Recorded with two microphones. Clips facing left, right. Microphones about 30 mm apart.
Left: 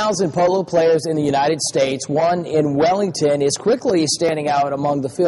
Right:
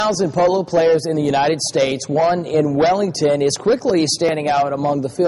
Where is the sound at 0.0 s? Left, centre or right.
Centre.